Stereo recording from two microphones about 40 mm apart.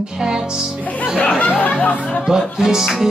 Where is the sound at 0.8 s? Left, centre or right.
Left.